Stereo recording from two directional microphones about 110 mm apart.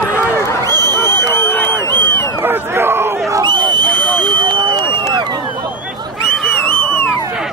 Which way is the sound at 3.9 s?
15° left (ahead or behind).